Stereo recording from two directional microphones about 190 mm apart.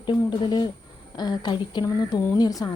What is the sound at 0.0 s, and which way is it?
A woman's voice, 25° left (ahead or behind).